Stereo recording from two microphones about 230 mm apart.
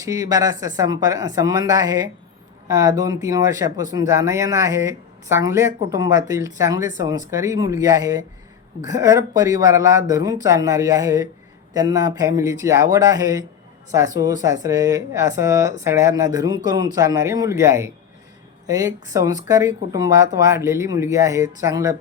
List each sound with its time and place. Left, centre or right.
0.0 s speech: centre